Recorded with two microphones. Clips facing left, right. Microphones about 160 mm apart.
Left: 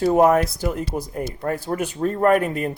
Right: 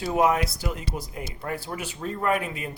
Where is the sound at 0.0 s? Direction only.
45° left (ahead or behind).